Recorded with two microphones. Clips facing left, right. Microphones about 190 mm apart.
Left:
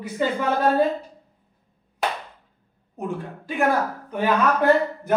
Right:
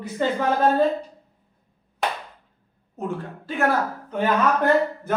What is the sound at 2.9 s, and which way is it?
A man's voice, 15° left (ahead or behind).